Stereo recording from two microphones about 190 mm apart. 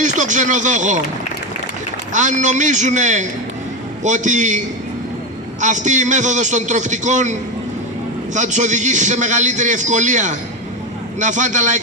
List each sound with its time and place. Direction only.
0.0 s speech: 40° right (ahead or behind)
2.1 s a man's voice: 40° right (ahead or behind)
8.4 s a man's voice: 40° right (ahead or behind)